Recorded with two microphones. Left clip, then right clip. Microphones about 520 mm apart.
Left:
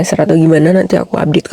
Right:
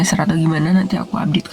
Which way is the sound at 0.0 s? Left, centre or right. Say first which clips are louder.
Left 8 dB; left.